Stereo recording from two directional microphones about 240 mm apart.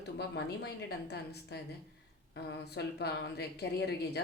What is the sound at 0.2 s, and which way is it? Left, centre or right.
A woman's voice, left.